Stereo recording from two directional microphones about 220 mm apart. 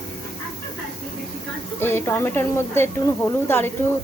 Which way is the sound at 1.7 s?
10° left (ahead or behind).